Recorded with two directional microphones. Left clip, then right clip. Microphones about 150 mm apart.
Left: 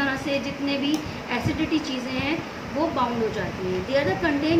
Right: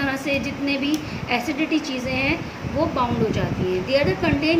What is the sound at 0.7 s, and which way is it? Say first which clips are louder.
A woman's voice: right 2 dB; 40° right (ahead or behind).